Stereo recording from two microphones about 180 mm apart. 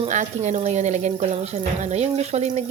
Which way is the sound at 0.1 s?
40° right (ahead or behind).